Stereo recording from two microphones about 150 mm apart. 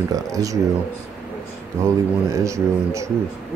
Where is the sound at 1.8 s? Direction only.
20° right (ahead or behind).